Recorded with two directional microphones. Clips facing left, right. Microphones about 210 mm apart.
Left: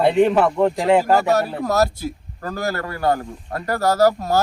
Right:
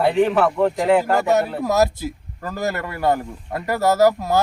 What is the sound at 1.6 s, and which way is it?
Speech, centre (ahead or behind).